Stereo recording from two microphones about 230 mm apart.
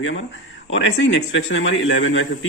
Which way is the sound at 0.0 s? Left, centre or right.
Left.